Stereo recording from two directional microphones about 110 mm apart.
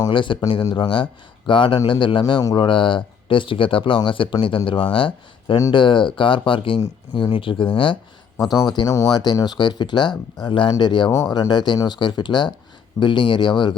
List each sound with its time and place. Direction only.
0.1 s speech: 50° left (ahead or behind)
8.9 s speech: 30° left (ahead or behind)